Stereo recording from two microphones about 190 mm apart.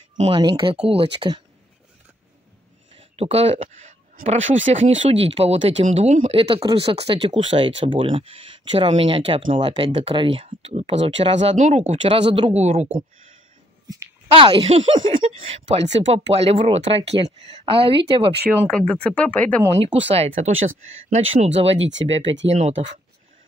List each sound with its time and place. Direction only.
0.2 s speech: 25° right (ahead or behind)
2.9 s speech: 30° right (ahead or behind)
14.3 s speech: 25° right (ahead or behind)
18.5 s speech: 5° left (ahead or behind)
19.8 s speech: 30° right (ahead or behind)
21.4 s speech: 35° right (ahead or behind)
21.7 s speech: 75° right (ahead or behind)
22.5 s speech: 35° right (ahead or behind)